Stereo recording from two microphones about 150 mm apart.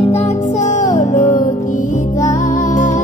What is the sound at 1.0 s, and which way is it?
Music, 60° left (ahead or behind).